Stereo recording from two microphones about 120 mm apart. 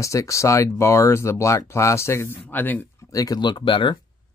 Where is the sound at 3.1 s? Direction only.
30° left (ahead or behind).